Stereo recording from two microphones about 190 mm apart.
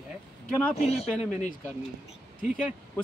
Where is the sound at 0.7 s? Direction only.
35° left (ahead or behind).